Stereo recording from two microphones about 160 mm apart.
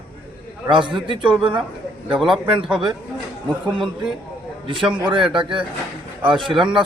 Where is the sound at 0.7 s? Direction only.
30° right (ahead or behind).